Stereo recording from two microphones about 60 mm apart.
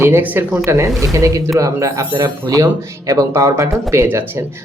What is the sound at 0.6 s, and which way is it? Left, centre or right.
Speech, right.